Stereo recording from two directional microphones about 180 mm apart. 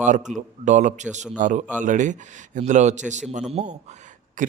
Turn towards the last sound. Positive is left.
turn(degrees=-45)  # may be behind; listen again after turning